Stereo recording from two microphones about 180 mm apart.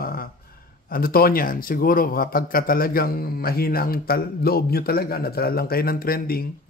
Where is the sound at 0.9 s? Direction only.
55° left (ahead or behind).